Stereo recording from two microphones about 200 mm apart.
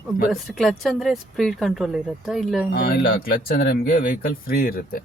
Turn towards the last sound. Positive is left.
turn(degrees=45)  # may be behind; listen again after turning